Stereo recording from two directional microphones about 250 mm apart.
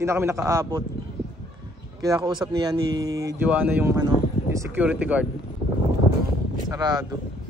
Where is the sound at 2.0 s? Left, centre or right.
Centre.